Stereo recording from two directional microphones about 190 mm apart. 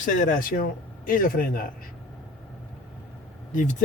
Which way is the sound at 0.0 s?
45° left (ahead or behind).